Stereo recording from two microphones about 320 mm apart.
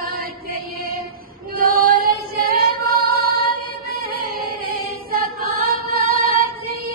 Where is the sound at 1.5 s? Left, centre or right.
Right.